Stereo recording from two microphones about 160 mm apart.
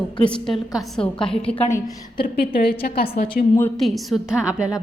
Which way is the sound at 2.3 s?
75° left (ahead or behind).